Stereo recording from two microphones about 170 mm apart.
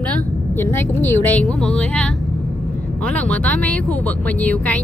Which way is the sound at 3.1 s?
10° left (ahead or behind).